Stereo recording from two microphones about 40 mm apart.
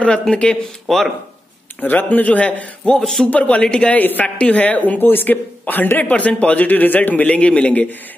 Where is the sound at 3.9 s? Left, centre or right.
Left.